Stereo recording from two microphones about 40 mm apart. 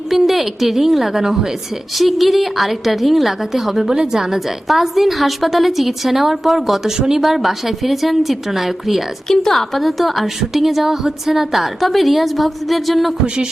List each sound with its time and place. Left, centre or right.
0.1 s a woman's voice: centre
2.0 s a woman's voice: centre
9.2 s a woman's voice: centre
13.2 s speech: right